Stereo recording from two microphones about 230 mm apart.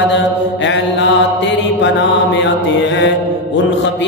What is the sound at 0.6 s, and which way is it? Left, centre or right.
Mantra, left.